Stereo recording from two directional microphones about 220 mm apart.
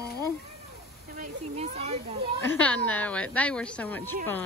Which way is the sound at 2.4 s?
10° left (ahead or behind).